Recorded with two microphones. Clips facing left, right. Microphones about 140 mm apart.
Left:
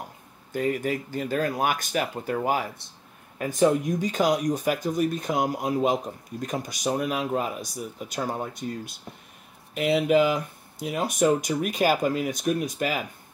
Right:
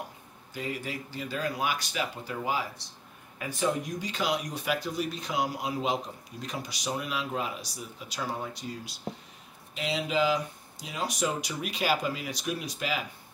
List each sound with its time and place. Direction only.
0.5 s speech: 50° left (ahead or behind)